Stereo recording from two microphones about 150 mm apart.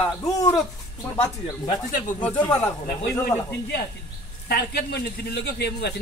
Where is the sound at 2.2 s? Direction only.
10° left (ahead or behind).